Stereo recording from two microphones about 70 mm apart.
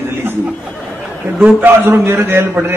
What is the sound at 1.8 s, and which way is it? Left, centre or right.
Speech, right.